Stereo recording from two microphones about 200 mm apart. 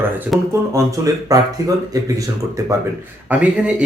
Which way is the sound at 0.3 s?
Centre (ahead or behind).